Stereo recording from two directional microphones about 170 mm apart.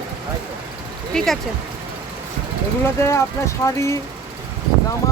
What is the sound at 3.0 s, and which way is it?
Speech, 15° left (ahead or behind).